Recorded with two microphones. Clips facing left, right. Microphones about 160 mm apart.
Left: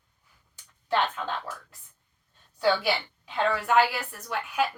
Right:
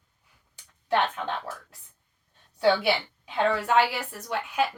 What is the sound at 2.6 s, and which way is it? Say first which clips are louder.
Speech: right 2 dB; 20° right (ahead or behind).